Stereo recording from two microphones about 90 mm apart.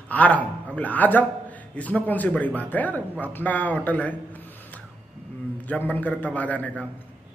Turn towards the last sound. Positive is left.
turn(degrees=15)  # may be behind; listen again after turning